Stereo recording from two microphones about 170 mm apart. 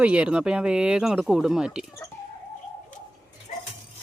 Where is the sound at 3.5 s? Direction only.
55° left (ahead or behind).